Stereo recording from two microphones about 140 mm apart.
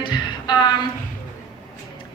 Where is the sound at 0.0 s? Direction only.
30° left (ahead or behind).